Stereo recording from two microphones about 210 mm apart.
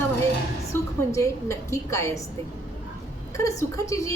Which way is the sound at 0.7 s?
10° left (ahead or behind).